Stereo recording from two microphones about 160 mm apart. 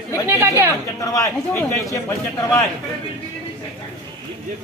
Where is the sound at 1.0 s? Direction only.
15° left (ahead or behind).